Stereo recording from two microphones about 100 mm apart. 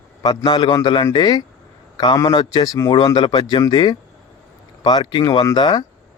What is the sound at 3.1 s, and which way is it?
A man's voice, 55° left (ahead or behind).